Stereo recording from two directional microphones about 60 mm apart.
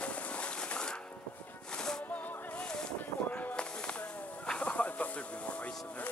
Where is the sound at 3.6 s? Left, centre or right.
Centre.